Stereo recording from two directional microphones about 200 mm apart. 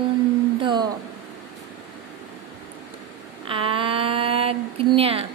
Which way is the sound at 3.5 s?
25° right (ahead or behind).